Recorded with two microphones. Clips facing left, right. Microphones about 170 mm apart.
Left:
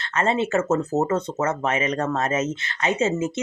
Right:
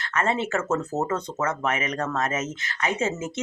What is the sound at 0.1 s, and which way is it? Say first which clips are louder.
Speech: left 3 dB; 25° left (ahead or behind).